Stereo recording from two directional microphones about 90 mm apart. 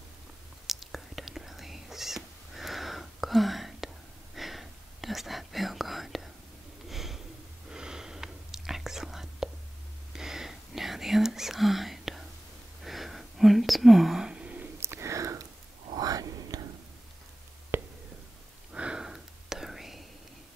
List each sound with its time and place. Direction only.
0.7 s whispering: centre (ahead or behind)
6.9 s snort: 5° right (ahead or behind)
7.7 s whispering: 10° right (ahead or behind)
14.8 s whispering: 30° right (ahead or behind)
17.7 s a sound: 25° right (ahead or behind)
18.7 s whispering: 10° right (ahead or behind)